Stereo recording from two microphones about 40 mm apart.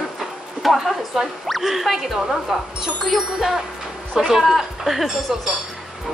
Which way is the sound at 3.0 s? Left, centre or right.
Centre.